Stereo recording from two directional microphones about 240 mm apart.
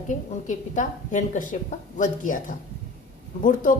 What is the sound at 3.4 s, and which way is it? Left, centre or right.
Speech, left.